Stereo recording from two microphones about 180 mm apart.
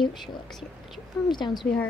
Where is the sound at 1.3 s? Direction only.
25° left (ahead or behind).